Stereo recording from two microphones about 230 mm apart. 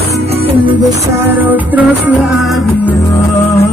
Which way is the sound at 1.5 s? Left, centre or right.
Centre.